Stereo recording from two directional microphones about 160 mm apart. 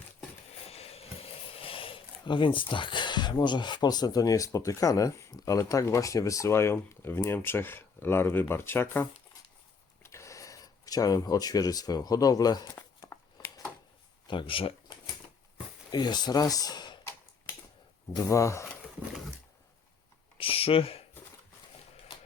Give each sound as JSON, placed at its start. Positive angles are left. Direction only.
{"t": 0.7, "sound": "speech", "side_deg": 40}
{"t": 12.7, "sound": "a sound", "side_deg": 15}
{"t": 14.3, "sound": "cash register", "side_deg": 30}
{"t": 15.9, "sound": "speech", "side_deg": 25}
{"t": 18.1, "sound": "speech", "side_deg": 20}
{"t": 20.4, "sound": "speech", "side_deg": 35}